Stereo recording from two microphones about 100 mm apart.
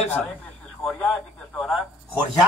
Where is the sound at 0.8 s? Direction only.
15° left (ahead or behind).